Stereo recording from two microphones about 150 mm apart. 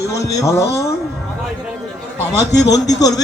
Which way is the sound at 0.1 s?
20° left (ahead or behind).